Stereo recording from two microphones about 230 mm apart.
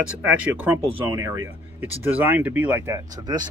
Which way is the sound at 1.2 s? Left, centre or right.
Centre.